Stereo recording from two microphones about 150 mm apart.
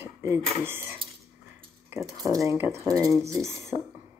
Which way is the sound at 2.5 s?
15° right (ahead or behind).